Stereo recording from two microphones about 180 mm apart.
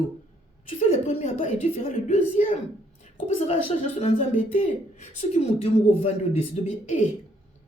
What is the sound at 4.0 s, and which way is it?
A woman's voice, 45° left (ahead or behind).